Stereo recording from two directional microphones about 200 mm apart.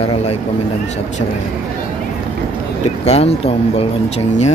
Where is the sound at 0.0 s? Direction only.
30° left (ahead or behind).